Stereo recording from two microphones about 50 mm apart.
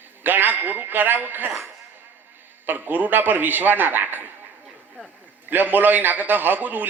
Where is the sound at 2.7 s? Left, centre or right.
Right.